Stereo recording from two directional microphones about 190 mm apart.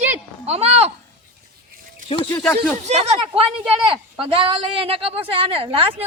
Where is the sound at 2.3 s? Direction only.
5° left (ahead or behind).